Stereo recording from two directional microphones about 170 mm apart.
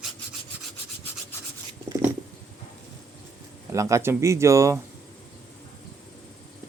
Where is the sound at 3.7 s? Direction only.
15° right (ahead or behind).